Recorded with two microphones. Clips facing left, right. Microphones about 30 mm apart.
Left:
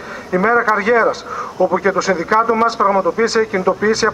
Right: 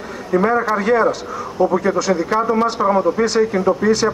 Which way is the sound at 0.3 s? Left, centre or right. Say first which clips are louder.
Left 2 dB; centre.